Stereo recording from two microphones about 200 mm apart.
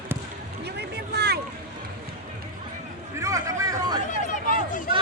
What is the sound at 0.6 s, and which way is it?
Boat, 55° right (ahead or behind).